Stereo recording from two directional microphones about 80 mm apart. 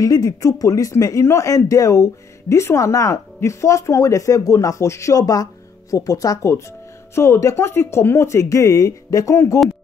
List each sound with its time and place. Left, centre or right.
0.0 s speech: left
7.2 s speech: left